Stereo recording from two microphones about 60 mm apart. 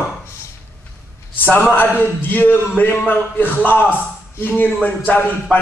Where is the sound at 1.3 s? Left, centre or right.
Left.